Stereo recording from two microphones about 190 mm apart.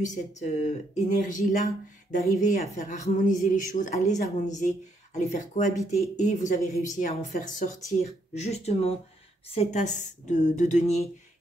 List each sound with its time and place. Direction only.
0.0 s speech: 40° left (ahead or behind)